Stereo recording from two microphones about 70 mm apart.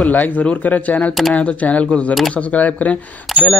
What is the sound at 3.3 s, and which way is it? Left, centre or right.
Speech, centre.